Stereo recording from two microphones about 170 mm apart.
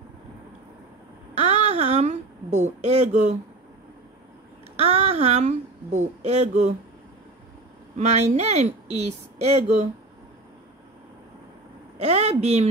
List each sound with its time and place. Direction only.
1.3 s a sound: 40° right (ahead or behind)
4.7 s speech: 40° right (ahead or behind)
8.0 s speech: 40° right (ahead or behind)
12.0 s speech: 40° right (ahead or behind)